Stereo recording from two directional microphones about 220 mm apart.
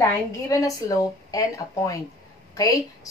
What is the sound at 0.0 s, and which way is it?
A woman's voice, 15° left (ahead or behind).